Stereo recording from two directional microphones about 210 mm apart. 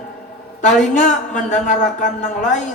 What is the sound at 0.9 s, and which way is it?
Speech, 35° left (ahead or behind).